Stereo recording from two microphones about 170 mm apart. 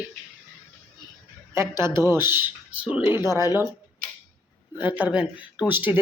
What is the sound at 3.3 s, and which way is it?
Speech, 20° left (ahead or behind).